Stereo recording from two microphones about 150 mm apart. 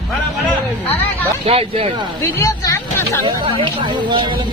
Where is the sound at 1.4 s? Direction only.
40° right (ahead or behind).